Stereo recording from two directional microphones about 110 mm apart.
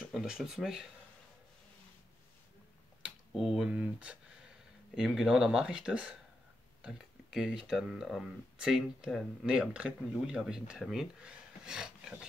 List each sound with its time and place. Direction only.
0.1 s speech: 5° right (ahead or behind)
3.3 s speech: centre (ahead or behind)